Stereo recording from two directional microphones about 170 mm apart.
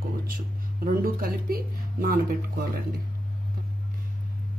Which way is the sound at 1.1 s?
60° right (ahead or behind).